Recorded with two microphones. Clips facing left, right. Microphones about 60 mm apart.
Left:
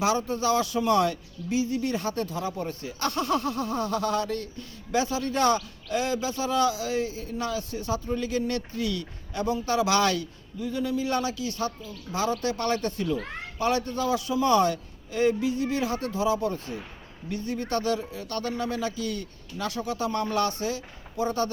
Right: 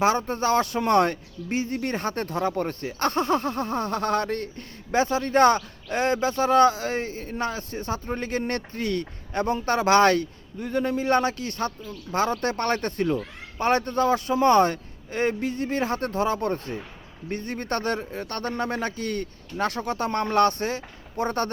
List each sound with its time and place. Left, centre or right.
0.0 s speech: right